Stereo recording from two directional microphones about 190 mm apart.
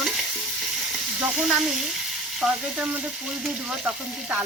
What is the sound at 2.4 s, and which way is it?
Speech, 5° right (ahead or behind).